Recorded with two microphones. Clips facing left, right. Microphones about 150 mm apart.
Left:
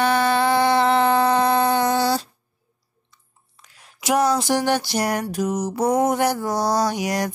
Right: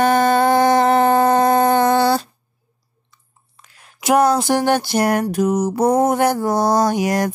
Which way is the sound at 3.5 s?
55° right (ahead or behind).